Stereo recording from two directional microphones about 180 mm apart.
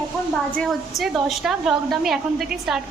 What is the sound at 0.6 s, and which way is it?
A woman's voice, centre (ahead or behind).